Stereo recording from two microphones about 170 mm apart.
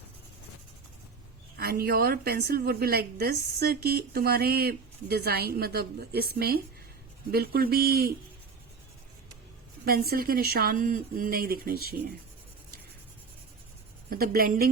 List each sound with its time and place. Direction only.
1.5 s a woman's voice: 65° right (ahead or behind)
9.8 s a woman's voice: 60° right (ahead or behind)
14.1 s a woman's voice: 60° right (ahead or behind)